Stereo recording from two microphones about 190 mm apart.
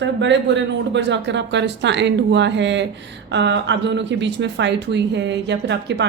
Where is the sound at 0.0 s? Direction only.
70° right (ahead or behind).